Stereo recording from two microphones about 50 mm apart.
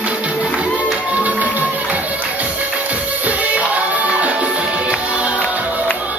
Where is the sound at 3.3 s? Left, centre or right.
Right.